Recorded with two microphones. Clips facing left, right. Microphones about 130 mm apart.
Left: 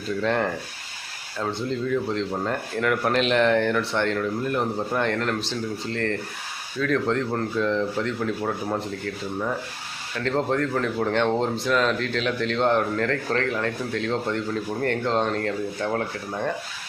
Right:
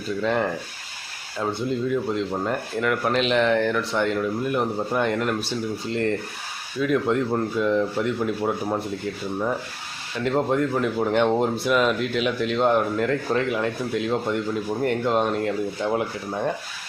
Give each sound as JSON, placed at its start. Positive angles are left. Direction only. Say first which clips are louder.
{"t": 0.2, "sound": "speech", "louder": "right 1 dB", "side_deg": -5}
{"t": 10.2, "sound": "speech", "louder": "right 2 dB", "side_deg": -10}